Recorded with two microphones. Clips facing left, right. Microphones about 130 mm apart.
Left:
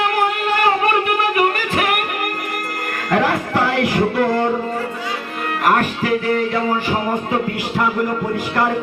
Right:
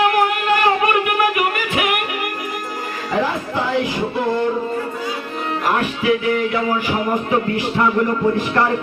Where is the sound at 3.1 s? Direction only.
70° left (ahead or behind); by 4.5 s 90° left.